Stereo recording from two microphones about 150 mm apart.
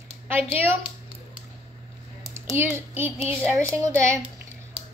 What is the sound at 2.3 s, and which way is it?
A child's voice, 15° right (ahead or behind).